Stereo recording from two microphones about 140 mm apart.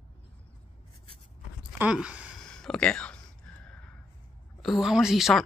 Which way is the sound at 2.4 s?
5° left (ahead or behind).